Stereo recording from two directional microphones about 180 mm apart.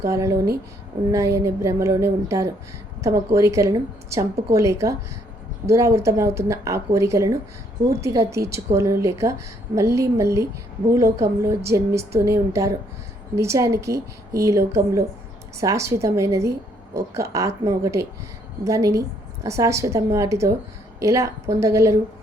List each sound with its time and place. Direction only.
0.0 s a woman's voice: 15° right (ahead or behind)